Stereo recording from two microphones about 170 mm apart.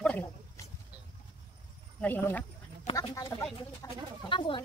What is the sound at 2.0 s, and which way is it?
Speech, 10° left (ahead or behind).